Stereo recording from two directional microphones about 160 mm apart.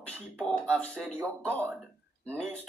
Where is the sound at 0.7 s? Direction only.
10° left (ahead or behind).